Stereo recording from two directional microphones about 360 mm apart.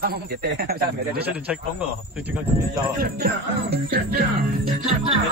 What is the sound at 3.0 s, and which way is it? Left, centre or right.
Music, right.